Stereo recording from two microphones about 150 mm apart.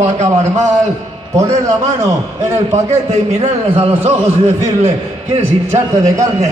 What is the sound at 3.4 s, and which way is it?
Speech, 40° right (ahead or behind).